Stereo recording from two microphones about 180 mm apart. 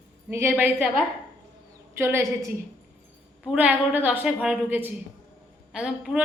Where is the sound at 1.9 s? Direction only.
15° right (ahead or behind).